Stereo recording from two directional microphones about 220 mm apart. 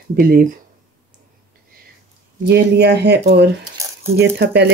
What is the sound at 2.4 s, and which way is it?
Speech, 50° right (ahead or behind).